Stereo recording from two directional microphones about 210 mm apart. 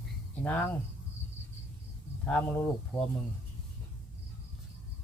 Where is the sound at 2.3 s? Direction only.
10° left (ahead or behind).